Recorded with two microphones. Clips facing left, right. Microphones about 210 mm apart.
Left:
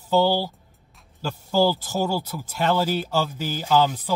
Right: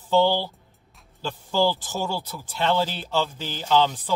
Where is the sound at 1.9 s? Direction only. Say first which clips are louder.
Left 4 dB; 45° left (ahead or behind).